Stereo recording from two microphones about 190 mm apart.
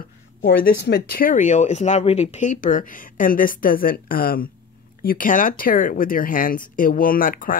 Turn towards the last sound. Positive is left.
turn(degrees=45)  # may be behind; listen again after turning